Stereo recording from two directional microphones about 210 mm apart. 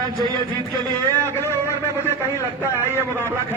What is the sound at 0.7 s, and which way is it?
Speech, 5° left (ahead or behind).